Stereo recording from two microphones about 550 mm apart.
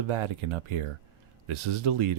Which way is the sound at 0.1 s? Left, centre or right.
Right.